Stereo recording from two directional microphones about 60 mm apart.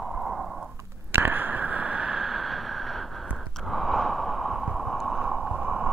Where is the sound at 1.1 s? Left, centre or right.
Right; by 3.0 s centre.